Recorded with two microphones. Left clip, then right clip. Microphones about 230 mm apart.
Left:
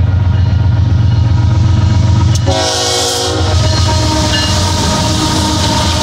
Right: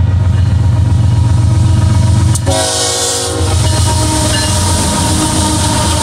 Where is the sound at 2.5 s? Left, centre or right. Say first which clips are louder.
Left 1 dB; centre.